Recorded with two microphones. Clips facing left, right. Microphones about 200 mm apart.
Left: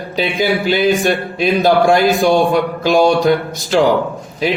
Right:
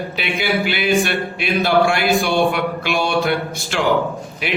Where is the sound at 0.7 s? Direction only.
40° left (ahead or behind).